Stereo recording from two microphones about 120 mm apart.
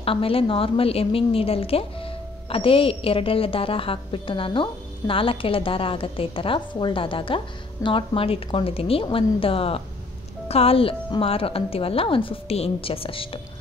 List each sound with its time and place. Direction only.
0.0 s a woman's voice: 50° left (ahead or behind)